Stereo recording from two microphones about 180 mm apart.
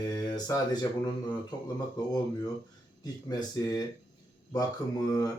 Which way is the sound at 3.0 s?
20° left (ahead or behind).